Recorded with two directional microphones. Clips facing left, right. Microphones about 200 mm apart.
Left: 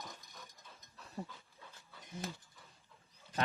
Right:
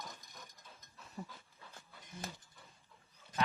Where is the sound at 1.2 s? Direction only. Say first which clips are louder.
Left 3 dB; 40° left (ahead or behind).